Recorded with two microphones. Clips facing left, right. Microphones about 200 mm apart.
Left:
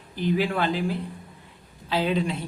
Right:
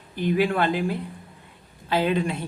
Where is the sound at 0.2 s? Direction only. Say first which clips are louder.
Right 2 dB; 55° right (ahead or behind).